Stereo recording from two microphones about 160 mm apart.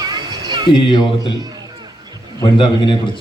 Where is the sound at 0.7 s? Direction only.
30° left (ahead or behind).